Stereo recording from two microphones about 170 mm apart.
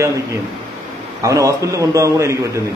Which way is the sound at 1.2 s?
20° right (ahead or behind).